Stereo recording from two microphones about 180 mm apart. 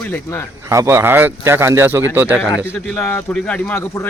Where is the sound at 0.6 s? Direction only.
15° right (ahead or behind).